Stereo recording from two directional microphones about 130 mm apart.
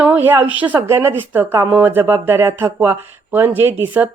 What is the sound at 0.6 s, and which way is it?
A woman's voice, 15° right (ahead or behind).